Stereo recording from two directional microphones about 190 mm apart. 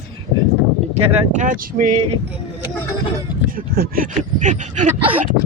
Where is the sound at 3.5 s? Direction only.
50° right (ahead or behind).